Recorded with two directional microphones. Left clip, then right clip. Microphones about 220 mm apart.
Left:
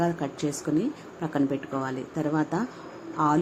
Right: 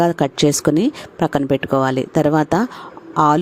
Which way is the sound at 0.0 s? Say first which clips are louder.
Right 12 dB; 45° right (ahead or behind).